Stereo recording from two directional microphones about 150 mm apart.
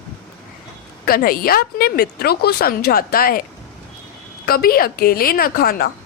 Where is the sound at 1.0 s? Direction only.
80° left.